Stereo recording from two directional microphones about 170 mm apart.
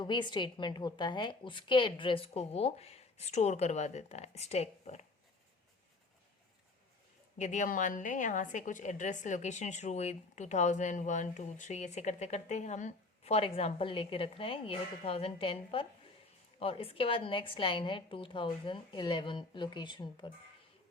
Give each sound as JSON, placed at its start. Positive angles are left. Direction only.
{"t": 0.0, "sound": "a woman's voice", "side_deg": 25}
{"t": 7.3, "sound": "a woman's voice", "side_deg": 45}